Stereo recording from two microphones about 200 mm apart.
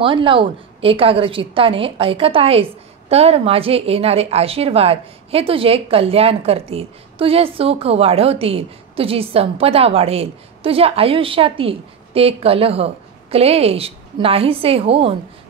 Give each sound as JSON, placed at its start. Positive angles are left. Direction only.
{"t": 0.0, "sound": "a woman's voice", "side_deg": -25}